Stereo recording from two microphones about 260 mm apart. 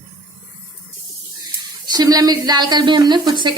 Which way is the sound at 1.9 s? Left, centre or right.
Centre.